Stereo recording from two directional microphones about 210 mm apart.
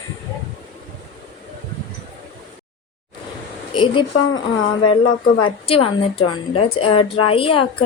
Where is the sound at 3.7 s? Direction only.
25° left (ahead or behind).